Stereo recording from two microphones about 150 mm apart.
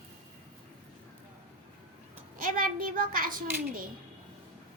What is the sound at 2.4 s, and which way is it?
Speech, 70° right (ahead or behind).